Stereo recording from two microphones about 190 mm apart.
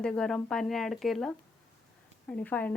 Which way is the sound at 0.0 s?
5° left (ahead or behind).